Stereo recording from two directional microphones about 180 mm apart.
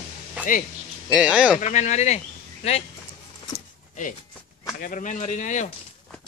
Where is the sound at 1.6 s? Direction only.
40° left (ahead or behind).